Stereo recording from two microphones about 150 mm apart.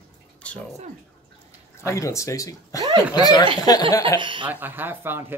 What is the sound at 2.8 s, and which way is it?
Speech, 30° right (ahead or behind).